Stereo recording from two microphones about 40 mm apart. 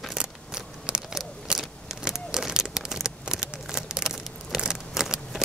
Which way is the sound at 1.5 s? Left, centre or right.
Centre.